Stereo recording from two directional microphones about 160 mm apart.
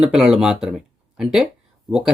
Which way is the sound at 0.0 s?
5° right (ahead or behind).